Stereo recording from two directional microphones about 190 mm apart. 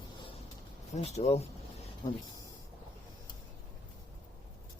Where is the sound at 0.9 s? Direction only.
35° left (ahead or behind).